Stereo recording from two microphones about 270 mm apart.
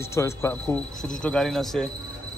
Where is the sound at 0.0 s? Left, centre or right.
Centre.